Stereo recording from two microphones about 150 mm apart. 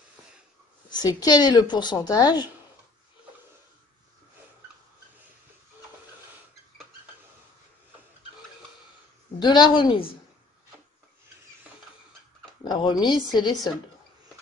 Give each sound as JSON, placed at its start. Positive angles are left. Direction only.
{"t": 0.8, "sound": "speech", "side_deg": 25}
{"t": 9.4, "sound": "speech", "side_deg": 30}
{"t": 12.6, "sound": "speech", "side_deg": 30}